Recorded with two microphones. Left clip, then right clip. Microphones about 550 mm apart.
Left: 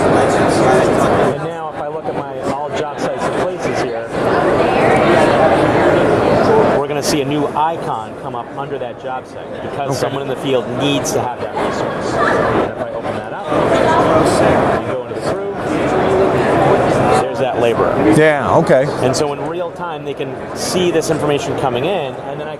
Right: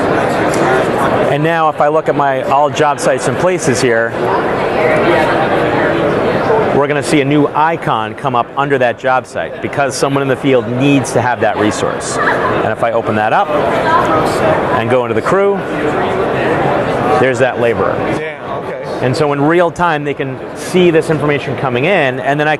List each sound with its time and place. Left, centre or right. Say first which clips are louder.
7.2 s speech: right 7 dB; right
17.4 s speech: right 3 dB; right
20.8 s speech: right 4 dB; right